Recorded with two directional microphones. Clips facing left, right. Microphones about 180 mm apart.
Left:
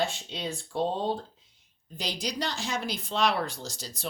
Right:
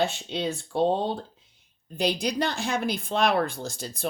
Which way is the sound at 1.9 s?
60° right (ahead or behind).